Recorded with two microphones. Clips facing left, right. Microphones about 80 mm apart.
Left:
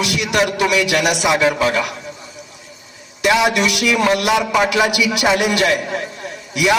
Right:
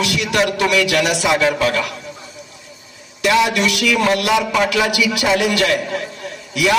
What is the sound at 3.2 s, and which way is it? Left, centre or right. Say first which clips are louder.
A man's voice: even; left.